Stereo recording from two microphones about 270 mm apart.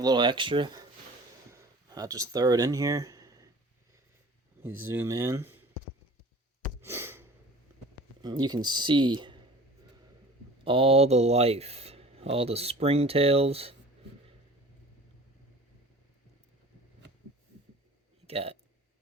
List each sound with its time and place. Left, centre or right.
0.0 s speech: centre
1.5 s a sound: centre
4.9 s speech: centre
6.8 s a sound: centre
8.2 s speech: centre
10.6 s speech: centre
18.3 s speech: right